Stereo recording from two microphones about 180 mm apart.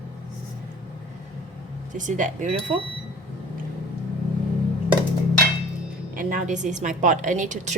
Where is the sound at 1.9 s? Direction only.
45° right (ahead or behind).